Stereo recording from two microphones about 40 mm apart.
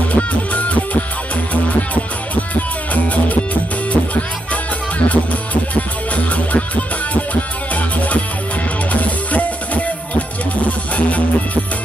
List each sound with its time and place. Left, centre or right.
0.1 s music: left
3.9 s speech: left
7.7 s music: left